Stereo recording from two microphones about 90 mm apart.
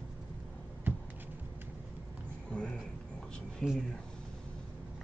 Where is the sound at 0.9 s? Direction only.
20° right (ahead or behind).